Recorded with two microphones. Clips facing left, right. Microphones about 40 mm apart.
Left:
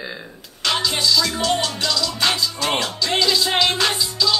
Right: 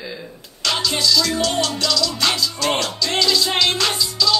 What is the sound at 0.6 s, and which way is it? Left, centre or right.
Music, left.